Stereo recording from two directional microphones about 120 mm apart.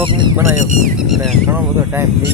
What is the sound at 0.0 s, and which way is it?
Speech, 40° right (ahead or behind).